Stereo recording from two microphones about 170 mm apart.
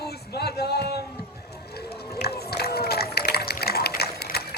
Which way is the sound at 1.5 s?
70° left (ahead or behind).